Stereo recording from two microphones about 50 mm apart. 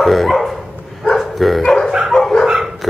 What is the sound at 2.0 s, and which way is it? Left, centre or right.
Dog, centre.